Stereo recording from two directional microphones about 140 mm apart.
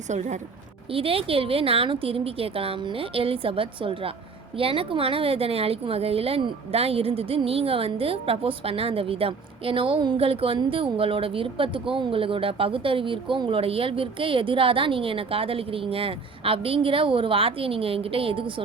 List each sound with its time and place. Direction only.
0.1 s a woman's voice: 60° right (ahead or behind)
0.9 s a woman's voice: 40° right (ahead or behind)